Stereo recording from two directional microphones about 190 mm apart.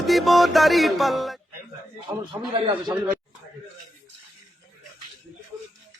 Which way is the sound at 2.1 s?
15° right (ahead or behind).